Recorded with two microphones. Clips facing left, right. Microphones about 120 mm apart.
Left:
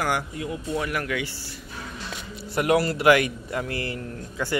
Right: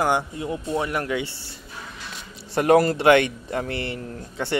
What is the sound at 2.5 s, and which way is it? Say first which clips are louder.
Speech: right 5 dB; 35° right (ahead or behind).